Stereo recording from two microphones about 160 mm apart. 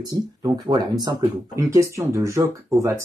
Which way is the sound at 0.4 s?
25° right (ahead or behind).